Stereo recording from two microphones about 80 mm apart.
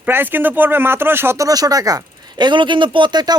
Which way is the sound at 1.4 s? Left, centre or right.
Right.